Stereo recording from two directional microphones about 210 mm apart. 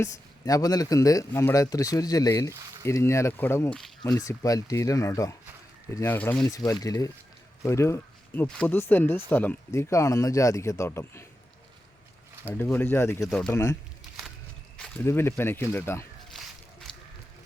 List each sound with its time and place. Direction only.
0.0 s speech: 15° left (ahead or behind)
2.5 s a sound: 15° right (ahead or behind)
2.8 s speech: 10° left (ahead or behind)
4.0 s speech: 15° left (ahead or behind)
12.5 s speech: 10° left (ahead or behind)
13.5 s speech: 15° left (ahead or behind)
14.8 s speech: 10° left (ahead or behind)
16.3 s a sound: centre (ahead or behind)